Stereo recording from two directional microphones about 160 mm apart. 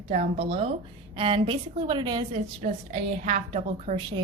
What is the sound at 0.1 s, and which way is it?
A woman's voice, 40° right (ahead or behind).